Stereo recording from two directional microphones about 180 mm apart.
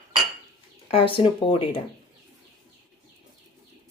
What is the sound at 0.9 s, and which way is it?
Speech, 30° left (ahead or behind).